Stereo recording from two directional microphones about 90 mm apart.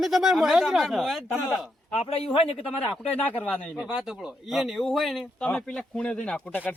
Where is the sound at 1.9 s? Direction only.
90° left.